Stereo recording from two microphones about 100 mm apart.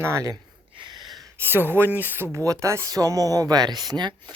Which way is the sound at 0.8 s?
45° right (ahead or behind).